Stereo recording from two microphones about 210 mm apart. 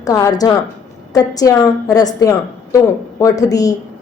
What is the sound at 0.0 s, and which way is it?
A woman's voice, 15° left (ahead or behind).